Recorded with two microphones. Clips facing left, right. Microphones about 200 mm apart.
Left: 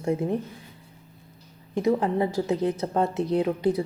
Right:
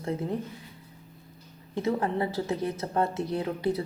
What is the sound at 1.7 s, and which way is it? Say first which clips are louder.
A woman's voice: left 4 dB; 15° left (ahead or behind).